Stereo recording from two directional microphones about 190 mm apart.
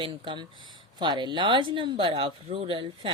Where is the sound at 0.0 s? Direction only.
25° right (ahead or behind).